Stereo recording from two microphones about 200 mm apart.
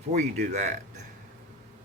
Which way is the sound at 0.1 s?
35° right (ahead or behind).